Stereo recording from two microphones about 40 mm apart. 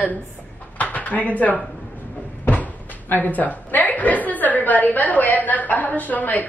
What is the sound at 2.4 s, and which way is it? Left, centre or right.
Speech, left.